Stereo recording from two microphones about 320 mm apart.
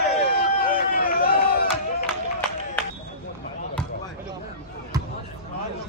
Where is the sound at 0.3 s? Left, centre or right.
Left.